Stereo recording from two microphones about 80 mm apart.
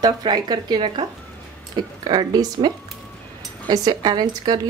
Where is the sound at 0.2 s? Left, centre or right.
Right.